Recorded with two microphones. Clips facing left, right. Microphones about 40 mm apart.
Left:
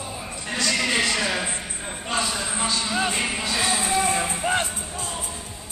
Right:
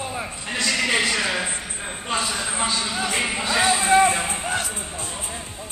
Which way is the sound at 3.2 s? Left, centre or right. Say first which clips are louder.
Right 2 dB; centre.